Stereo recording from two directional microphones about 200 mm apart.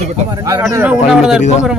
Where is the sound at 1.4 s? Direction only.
35° left (ahead or behind).